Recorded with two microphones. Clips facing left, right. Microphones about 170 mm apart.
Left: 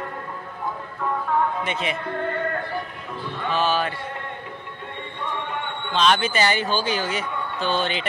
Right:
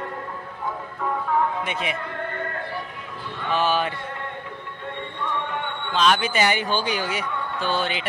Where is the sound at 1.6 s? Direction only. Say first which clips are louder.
Left 1 dB; 10° right (ahead or behind).